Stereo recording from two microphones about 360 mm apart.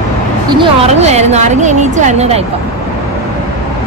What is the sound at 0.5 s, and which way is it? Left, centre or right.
Speech, centre.